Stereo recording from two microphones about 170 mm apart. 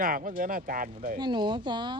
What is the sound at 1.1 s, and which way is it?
Speech, 25° right (ahead or behind).